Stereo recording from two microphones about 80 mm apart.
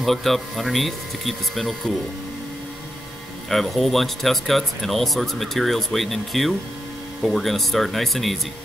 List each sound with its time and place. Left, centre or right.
0.0 s speech: centre
3.4 s speech: centre